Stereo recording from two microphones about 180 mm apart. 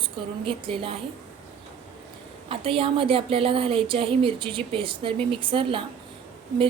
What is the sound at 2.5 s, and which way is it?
Speech, 30° right (ahead or behind).